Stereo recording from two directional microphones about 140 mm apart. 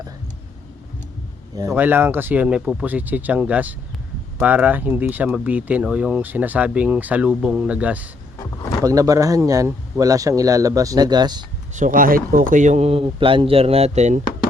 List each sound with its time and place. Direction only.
1.7 s speech: 15° right (ahead or behind)
8.8 s speech: 25° right (ahead or behind)
11.7 s speech: 70° right (ahead or behind); by 14.2 s 55° right (ahead or behind)